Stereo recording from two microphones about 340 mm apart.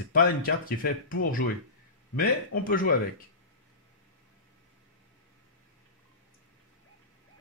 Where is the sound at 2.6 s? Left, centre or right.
Left.